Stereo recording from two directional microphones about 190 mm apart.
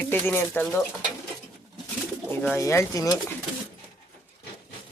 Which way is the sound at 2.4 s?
15° left (ahead or behind).